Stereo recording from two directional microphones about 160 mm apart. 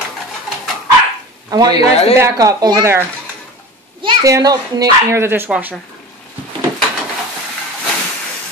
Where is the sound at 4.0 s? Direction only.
30° right (ahead or behind).